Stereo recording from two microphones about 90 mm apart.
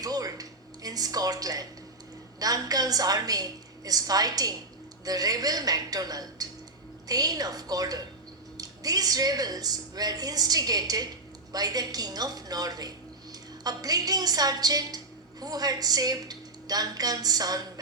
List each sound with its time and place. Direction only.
0.0 s a woman's voice: 45° right (ahead or behind)